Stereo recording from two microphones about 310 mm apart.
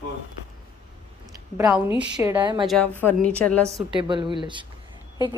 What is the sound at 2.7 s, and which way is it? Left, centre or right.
Speech, centre.